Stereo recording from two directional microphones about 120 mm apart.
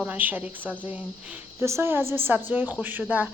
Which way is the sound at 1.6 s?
20° right (ahead or behind).